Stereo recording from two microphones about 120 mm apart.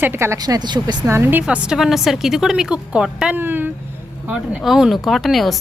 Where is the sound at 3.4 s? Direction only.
15° right (ahead or behind).